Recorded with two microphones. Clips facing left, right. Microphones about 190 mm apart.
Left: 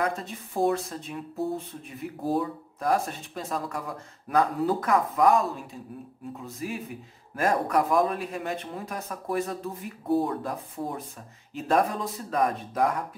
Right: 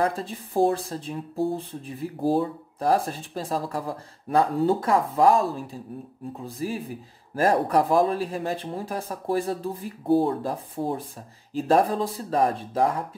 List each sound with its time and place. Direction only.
0.0 s speech: 30° right (ahead or behind)